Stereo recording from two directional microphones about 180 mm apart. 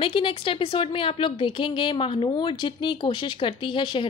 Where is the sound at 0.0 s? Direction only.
30° left (ahead or behind).